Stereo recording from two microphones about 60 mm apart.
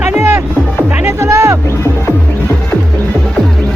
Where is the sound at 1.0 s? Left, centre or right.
Right.